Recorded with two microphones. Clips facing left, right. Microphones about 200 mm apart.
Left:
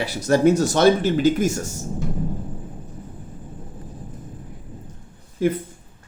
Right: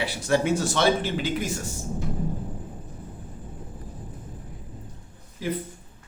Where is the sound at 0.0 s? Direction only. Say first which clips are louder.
Left 7 dB; 40° left (ahead or behind).